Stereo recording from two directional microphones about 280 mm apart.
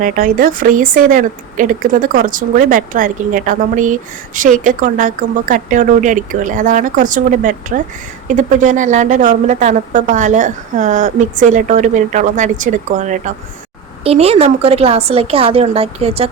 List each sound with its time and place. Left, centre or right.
0.0 s speech: right